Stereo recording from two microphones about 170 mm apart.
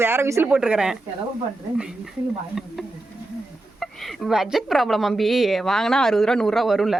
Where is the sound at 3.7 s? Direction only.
Centre (ahead or behind).